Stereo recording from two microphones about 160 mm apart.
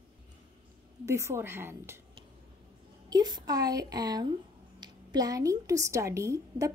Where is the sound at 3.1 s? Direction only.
25° right (ahead or behind).